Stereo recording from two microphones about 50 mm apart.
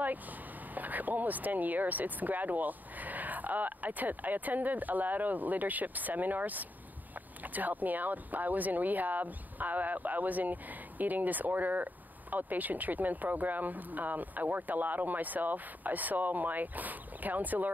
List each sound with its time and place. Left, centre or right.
0.7 s speech: right